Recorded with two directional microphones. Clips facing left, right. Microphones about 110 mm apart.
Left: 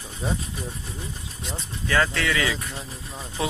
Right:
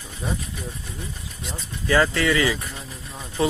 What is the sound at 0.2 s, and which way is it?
Speech, 25° left (ahead or behind).